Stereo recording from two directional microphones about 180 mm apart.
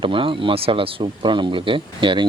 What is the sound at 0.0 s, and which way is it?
Speech, 30° right (ahead or behind).